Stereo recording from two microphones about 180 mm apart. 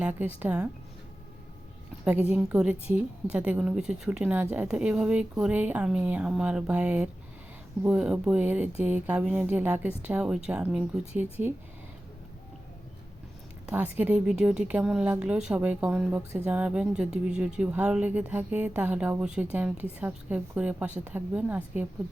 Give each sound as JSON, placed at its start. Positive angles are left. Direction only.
{"t": 0.3, "sound": "speech", "side_deg": -10}
{"t": 2.3, "sound": "a woman's voice", "side_deg": -5}
{"t": 13.7, "sound": "a woman's voice", "side_deg": -10}